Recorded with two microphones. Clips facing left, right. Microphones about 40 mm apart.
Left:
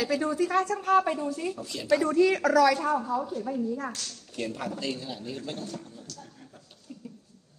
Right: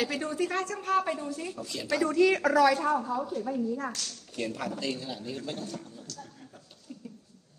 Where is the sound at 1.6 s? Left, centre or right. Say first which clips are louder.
Even; left.